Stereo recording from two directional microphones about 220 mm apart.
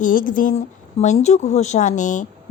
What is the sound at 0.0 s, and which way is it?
Speech, 40° left (ahead or behind).